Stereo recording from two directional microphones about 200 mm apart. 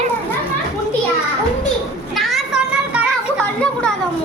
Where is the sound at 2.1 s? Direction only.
Centre (ahead or behind).